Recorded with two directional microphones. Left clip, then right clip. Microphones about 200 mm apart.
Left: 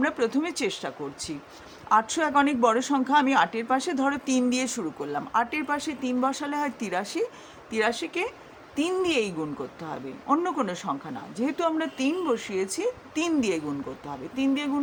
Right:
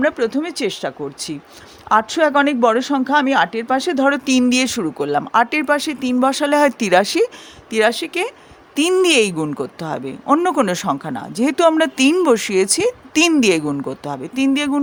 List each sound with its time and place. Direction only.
0.0 s speech: 25° right (ahead or behind); by 14.8 s 45° right (ahead or behind)